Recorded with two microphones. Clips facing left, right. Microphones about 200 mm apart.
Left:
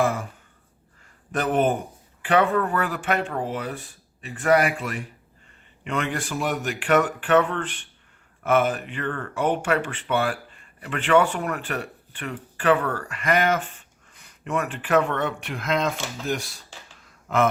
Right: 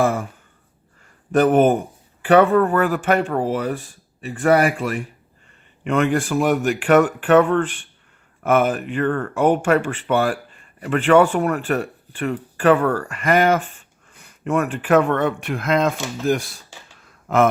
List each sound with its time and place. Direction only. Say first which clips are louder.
0.0 s speech: right 4 dB; 45° right (ahead or behind)
1.3 s speech: right 8 dB; 50° right (ahead or behind)